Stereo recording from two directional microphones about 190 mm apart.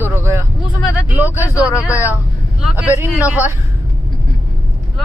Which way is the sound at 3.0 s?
5° right (ahead or behind).